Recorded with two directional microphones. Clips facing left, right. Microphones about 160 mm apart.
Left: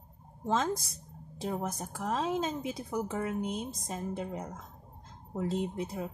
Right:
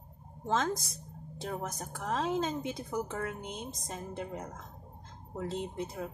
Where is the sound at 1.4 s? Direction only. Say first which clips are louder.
Left 3 dB; 5° left (ahead or behind).